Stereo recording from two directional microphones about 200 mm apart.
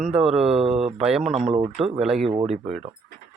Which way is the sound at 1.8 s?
5° right (ahead or behind).